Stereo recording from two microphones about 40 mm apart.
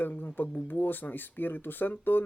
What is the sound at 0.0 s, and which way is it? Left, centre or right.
Speech, left.